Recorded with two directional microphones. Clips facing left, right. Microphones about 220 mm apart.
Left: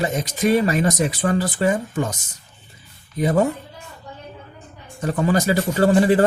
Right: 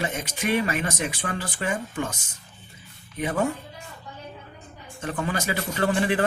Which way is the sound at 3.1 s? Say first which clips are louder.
Left 7 dB; 40° left (ahead or behind).